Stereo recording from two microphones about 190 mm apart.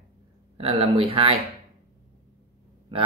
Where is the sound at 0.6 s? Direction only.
30° right (ahead or behind).